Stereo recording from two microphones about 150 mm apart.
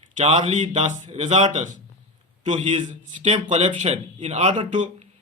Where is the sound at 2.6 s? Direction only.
40° right (ahead or behind).